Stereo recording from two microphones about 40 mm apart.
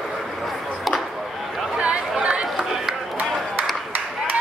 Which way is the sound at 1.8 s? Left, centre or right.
Right.